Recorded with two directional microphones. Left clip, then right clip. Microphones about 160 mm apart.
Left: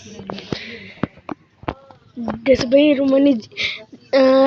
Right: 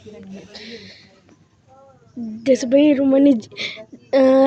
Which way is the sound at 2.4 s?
25° right (ahead or behind).